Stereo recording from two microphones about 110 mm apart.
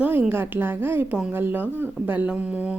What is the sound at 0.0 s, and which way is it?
Speech, 20° right (ahead or behind).